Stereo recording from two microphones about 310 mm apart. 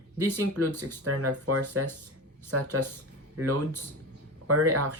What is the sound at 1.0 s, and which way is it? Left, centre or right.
Speech, right.